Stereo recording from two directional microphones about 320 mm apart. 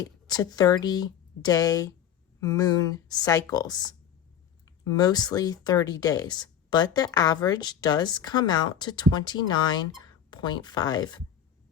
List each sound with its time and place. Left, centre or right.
0.0 s speech: centre